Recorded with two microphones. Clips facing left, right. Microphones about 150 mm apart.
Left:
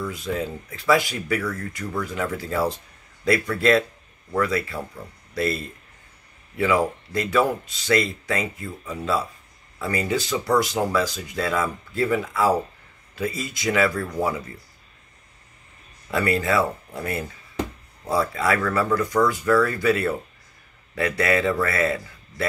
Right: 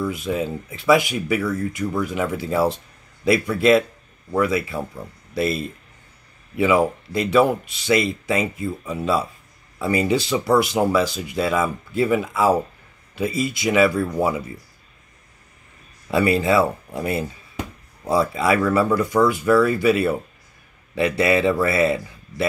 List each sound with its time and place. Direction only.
0.1 s speech: 20° right (ahead or behind)
16.1 s speech: 20° right (ahead or behind)